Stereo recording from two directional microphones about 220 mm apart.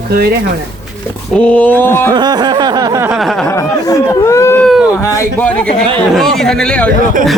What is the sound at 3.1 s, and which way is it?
Speech, centre (ahead or behind).